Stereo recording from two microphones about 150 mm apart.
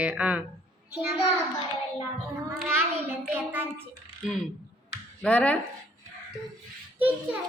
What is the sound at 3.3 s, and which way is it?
Speech, 15° right (ahead or behind).